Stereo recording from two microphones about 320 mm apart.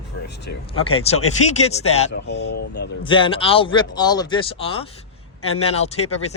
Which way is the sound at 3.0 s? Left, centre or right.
Centre.